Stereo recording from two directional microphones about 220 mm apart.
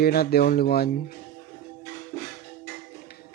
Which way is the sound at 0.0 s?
45° left (ahead or behind).